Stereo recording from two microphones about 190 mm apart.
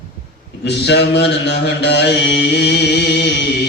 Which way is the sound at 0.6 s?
60° left (ahead or behind).